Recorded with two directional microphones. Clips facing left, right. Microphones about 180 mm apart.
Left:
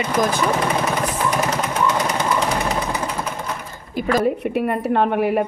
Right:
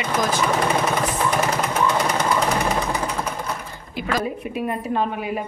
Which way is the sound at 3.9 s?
45° left (ahead or behind).